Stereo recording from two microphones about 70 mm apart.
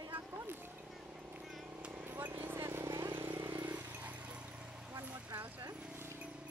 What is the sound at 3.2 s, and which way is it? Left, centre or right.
Vehicle, right.